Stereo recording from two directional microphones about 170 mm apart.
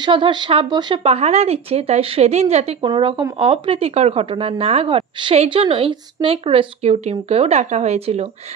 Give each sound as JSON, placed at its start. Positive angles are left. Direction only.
{"t": 0.0, "sound": "speech", "side_deg": -25}